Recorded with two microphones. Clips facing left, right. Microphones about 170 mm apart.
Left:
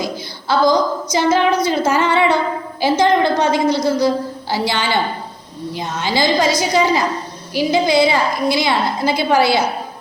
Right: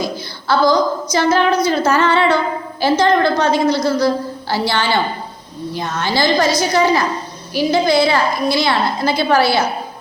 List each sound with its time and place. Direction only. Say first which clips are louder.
0.0 s a woman's voice: right 1 dB; 20° left (ahead or behind)